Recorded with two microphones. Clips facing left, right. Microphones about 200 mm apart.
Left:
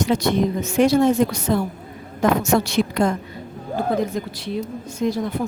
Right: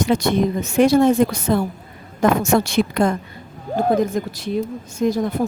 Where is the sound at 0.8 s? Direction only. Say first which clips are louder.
Right 2 dB; 55° right (ahead or behind).